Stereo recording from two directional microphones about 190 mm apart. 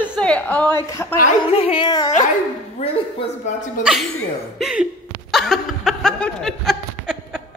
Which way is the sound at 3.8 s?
Centre (ahead or behind).